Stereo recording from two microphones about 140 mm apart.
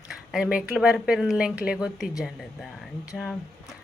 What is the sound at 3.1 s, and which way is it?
Speech, centre (ahead or behind).